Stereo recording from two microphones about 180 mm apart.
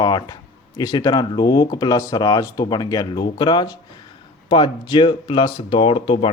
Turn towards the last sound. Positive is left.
turn(degrees=30)  # may be behind; listen again after turning